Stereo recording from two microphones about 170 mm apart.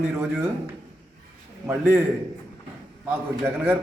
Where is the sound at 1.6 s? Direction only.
10° right (ahead or behind).